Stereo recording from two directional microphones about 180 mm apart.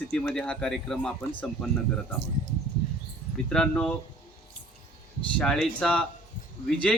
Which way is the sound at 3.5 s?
5° left (ahead or behind).